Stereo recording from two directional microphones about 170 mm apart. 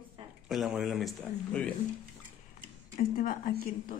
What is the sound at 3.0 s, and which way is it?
Speech, 55° left (ahead or behind).